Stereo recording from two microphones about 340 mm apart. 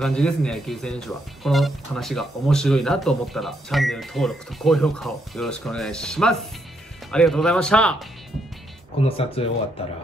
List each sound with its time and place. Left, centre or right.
0.0 s speech: centre
9.0 s speech: centre